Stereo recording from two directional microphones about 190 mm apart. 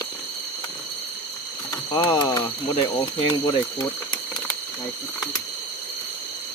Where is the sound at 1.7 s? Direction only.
20° left (ahead or behind).